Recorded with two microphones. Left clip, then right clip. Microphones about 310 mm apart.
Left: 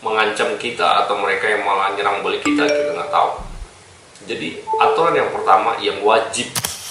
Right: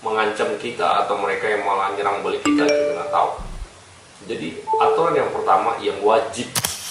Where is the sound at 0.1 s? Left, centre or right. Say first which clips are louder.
Left 3 dB; centre.